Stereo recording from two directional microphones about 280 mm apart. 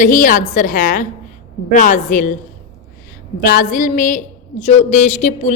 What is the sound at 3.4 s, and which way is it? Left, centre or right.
A woman's voice, left.